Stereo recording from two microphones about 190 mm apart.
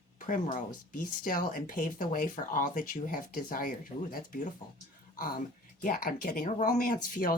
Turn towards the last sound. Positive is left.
turn(degrees=50)  # may be behind; listen again after turning